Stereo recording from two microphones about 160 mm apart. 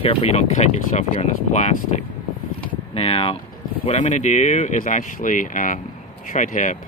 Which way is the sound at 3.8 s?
45° left (ahead or behind).